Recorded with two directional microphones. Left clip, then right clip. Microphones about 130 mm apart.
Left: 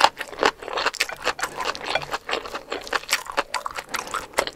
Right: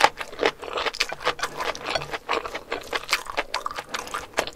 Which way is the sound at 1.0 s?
25° left (ahead or behind).